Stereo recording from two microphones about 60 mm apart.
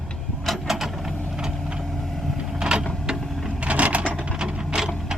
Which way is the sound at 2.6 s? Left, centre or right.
Centre.